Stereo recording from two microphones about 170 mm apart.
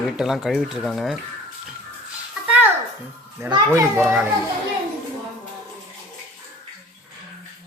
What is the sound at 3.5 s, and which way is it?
Speech, 20° right (ahead or behind).